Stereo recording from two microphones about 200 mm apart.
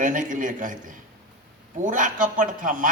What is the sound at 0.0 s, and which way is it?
A man's voice, 40° right (ahead or behind).